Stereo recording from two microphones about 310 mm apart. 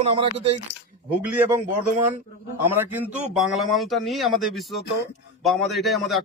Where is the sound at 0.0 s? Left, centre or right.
Centre.